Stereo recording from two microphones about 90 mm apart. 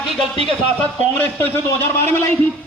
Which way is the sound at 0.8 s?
20° left (ahead or behind).